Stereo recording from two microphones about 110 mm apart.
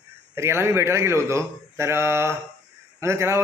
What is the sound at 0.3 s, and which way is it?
Speech, 25° right (ahead or behind).